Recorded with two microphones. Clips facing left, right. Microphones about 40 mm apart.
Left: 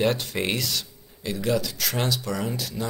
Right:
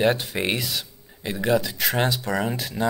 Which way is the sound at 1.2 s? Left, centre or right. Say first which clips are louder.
Right 3 dB; right.